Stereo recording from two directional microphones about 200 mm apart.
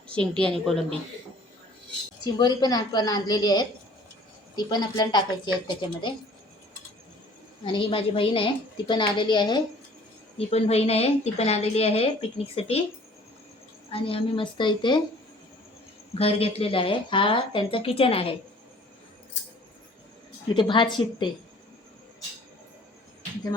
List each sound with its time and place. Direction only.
0.1 s a woman's voice: 5° left (ahead or behind)
2.2 s speech: 20° left (ahead or behind)
7.6 s a woman's voice: 25° left (ahead or behind)
13.9 s speech: 30° left (ahead or behind)
16.1 s speech: 30° left (ahead or behind)
20.5 s speech: 25° left (ahead or behind)